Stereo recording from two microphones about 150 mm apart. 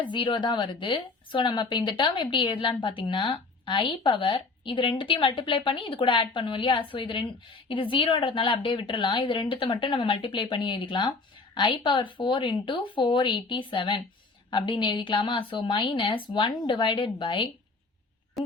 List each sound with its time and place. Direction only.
0.0 s a woman's voice: 35° left (ahead or behind)
18.4 s busy signal: centre (ahead or behind)